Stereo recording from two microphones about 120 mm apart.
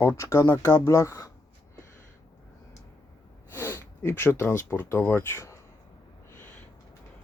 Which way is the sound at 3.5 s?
20° left (ahead or behind).